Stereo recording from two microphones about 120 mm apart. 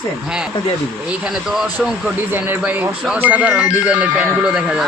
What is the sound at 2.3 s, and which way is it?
Speech, 15° right (ahead or behind).